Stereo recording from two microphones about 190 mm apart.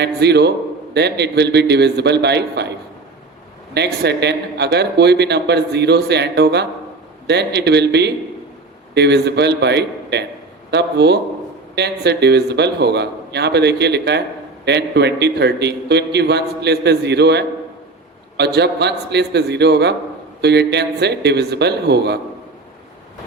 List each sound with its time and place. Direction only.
0.0 s speech: 60° right (ahead or behind)
3.8 s speech: 65° right (ahead or behind)